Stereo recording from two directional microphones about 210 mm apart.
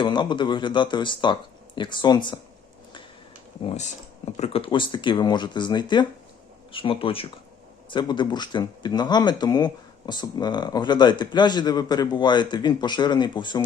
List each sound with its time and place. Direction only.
0.0 s speech: 20° left (ahead or behind)
3.7 s speech: 35° left (ahead or behind)